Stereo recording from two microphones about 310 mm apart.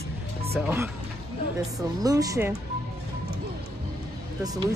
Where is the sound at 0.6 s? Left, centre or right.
Centre.